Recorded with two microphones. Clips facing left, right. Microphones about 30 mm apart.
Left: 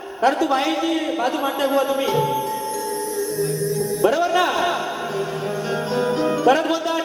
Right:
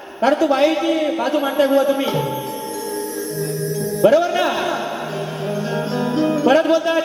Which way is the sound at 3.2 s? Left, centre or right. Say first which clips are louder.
Left 2 dB; centre.